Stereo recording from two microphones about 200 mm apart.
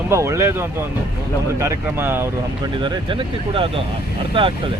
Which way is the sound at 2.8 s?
25° right (ahead or behind).